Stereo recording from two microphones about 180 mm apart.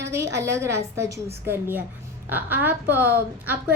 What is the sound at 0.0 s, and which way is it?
Speech, 15° right (ahead or behind).